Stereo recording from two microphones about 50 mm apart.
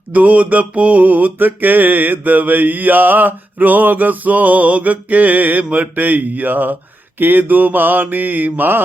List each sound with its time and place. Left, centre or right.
0.1 s mantra: right